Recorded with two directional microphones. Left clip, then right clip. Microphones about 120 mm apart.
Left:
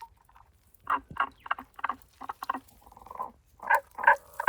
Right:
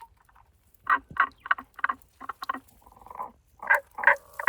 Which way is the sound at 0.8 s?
25° right (ahead or behind).